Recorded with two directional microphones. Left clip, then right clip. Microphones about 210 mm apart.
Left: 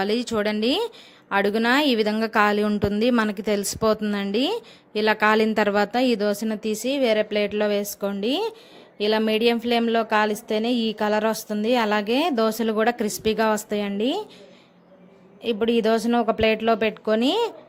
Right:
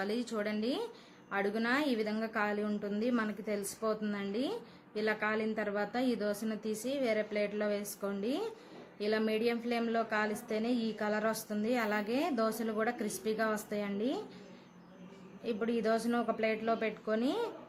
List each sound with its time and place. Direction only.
0.0 s a woman's voice: 45° left (ahead or behind)
15.4 s speech: 40° left (ahead or behind)